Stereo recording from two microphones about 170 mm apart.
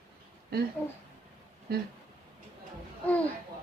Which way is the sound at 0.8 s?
10° left (ahead or behind).